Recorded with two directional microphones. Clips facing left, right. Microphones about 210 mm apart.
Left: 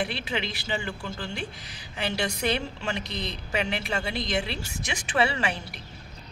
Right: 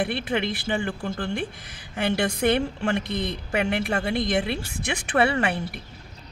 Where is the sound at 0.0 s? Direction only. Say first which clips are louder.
Right 5 dB; 55° right (ahead or behind).